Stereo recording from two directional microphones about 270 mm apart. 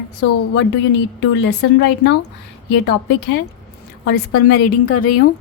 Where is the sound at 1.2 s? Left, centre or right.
Left.